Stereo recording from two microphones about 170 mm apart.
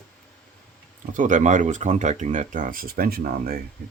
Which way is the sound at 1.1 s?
50° right (ahead or behind).